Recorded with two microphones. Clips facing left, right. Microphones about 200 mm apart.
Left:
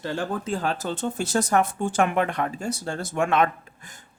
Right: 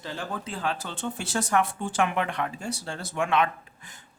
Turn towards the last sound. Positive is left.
turn(degrees=45)  # may be behind; listen again after turning